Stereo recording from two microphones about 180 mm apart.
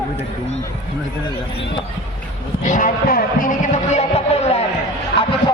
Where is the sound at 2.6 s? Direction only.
45° left (ahead or behind).